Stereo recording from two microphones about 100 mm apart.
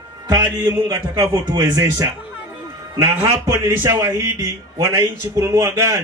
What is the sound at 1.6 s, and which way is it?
A man's voice, 30° right (ahead or behind).